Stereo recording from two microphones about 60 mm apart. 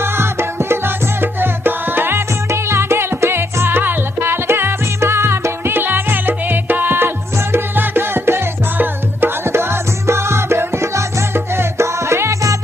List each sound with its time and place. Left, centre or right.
0.0 s music: right
2.5 s music: right